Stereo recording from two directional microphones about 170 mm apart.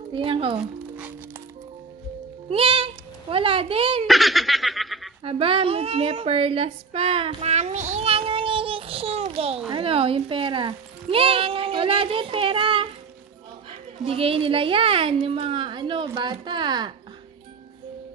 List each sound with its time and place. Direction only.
0.1 s speech: 30° right (ahead or behind)
2.5 s a child's voice: 30° right (ahead or behind)
4.1 s laughter: centre (ahead or behind)
5.2 s a woman's voice: 30° right (ahead or behind)
14.0 s speech: 35° right (ahead or behind)